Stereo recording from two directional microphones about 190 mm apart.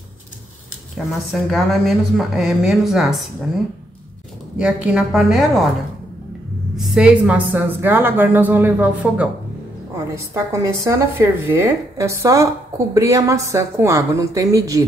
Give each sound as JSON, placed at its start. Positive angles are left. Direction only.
{"t": 0.9, "sound": "a woman's voice", "side_deg": 0}
{"t": 4.6, "sound": "a woman's voice", "side_deg": -5}
{"t": 6.8, "sound": "a woman's voice", "side_deg": -5}